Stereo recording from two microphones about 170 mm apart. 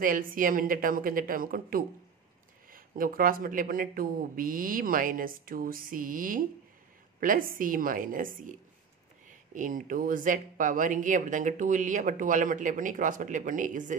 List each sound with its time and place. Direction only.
0.0 s speech: 55° right (ahead or behind)